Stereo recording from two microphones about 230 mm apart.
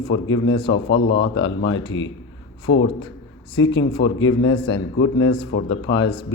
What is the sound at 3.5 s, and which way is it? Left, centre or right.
Speech, left.